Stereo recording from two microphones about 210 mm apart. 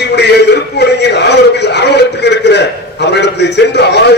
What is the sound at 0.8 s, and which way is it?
A man's voice, 55° left (ahead or behind).